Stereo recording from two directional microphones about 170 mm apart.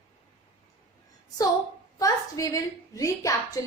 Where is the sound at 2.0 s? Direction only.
20° left (ahead or behind).